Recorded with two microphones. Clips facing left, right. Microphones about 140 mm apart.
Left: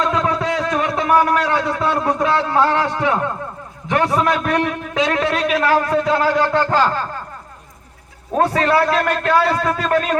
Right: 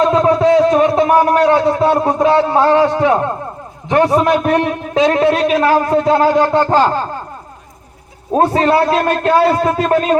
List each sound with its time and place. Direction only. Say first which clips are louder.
0.0 s a man's voice: right 8 dB; 25° right (ahead or behind)
8.3 s a man's voice: right 4 dB; 25° right (ahead or behind)